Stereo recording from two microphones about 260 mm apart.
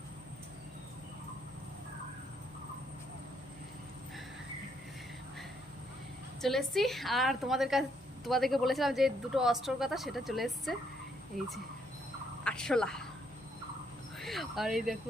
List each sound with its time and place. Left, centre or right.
6.4 s a woman's voice: centre
11.3 s speech: right
12.5 s speech: centre
14.2 s speech: centre